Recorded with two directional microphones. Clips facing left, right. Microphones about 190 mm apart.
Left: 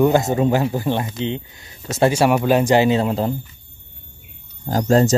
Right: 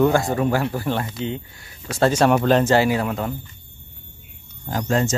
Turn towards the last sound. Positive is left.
turn(degrees=35)  # may be behind; listen again after turning